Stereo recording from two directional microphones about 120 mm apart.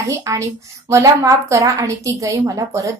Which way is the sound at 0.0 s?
25° right (ahead or behind).